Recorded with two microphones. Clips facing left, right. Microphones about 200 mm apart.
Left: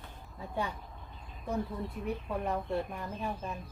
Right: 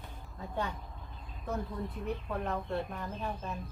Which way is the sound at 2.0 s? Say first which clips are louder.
Left 2 dB; 10° left (ahead or behind).